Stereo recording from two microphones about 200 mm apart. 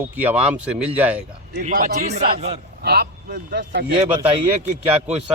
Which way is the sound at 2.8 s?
55° right (ahead or behind).